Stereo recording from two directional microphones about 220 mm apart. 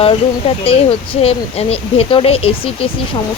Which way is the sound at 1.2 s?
30° left (ahead or behind).